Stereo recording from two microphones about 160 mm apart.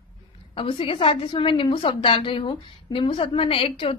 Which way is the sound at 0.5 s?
35° left (ahead or behind).